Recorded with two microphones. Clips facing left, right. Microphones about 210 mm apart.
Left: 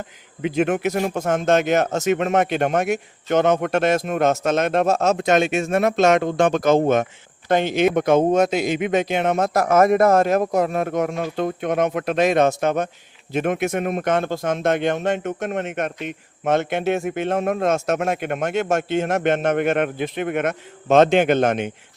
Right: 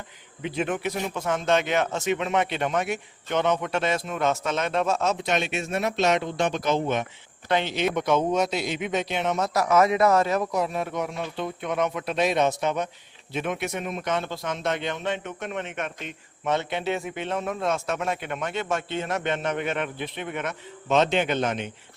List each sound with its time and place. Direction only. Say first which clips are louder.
0.9 s speech: left 6 dB; 45° left (ahead or behind)